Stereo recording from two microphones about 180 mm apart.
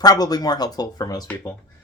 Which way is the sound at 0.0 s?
20° left (ahead or behind).